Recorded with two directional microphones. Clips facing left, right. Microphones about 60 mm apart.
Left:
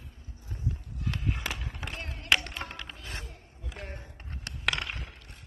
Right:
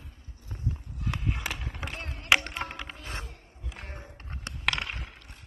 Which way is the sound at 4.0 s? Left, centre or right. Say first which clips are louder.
Right 2 dB; right.